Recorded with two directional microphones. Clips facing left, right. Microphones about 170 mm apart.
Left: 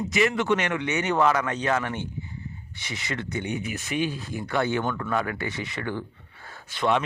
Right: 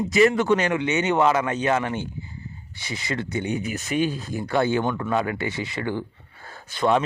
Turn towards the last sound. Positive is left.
turn(degrees=-40)  # may be behind; listen again after turning